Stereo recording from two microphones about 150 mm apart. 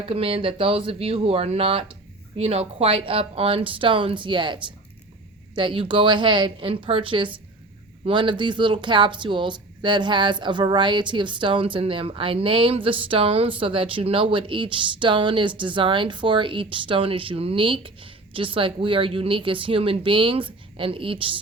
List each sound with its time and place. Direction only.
0.1 s speech: 40° right (ahead or behind)